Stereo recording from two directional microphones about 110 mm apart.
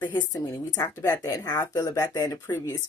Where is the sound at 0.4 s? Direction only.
30° left (ahead or behind).